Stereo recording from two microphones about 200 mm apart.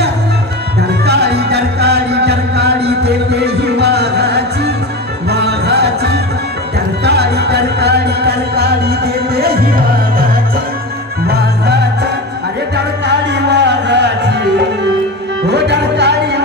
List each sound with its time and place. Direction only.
1.0 s music: 55° right (ahead or behind)
11.2 s music: 55° right (ahead or behind)
15.4 s music: 60° right (ahead or behind)